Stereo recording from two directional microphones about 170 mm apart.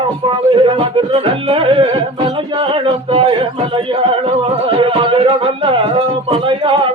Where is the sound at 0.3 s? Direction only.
30° right (ahead or behind).